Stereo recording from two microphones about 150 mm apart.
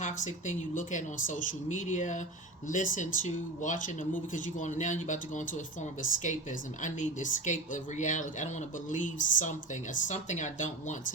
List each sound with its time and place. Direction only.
0.0 s speech: 55° left (ahead or behind)